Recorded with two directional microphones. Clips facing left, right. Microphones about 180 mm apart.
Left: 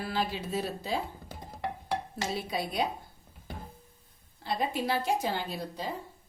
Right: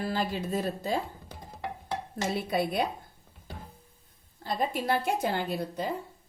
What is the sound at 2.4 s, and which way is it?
Speech, 55° right (ahead or behind).